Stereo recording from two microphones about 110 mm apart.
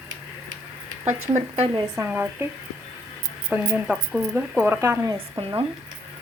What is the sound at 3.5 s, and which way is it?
Speech, 10° right (ahead or behind).